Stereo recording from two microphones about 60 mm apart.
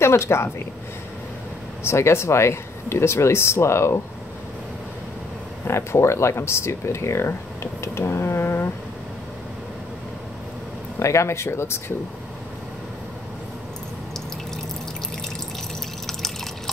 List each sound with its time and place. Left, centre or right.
0.0 s speech: left
1.8 s speech: left
5.7 s speech: left
11.0 s speech: left
16.1 s drip: centre